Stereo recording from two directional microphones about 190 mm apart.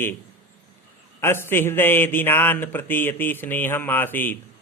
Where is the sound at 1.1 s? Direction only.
10° left (ahead or behind).